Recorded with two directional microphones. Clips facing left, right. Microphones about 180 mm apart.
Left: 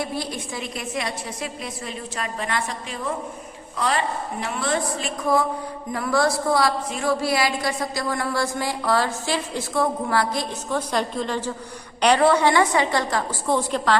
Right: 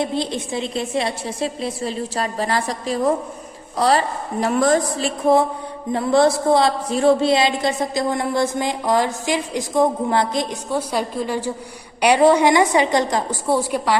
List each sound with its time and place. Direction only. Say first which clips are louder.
0.0 s a woman's voice: right 6 dB; 25° right (ahead or behind)
10.8 s a woman's voice: right 2 dB; 10° right (ahead or behind)